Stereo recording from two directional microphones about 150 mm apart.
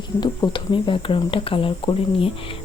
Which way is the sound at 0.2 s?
30° left (ahead or behind).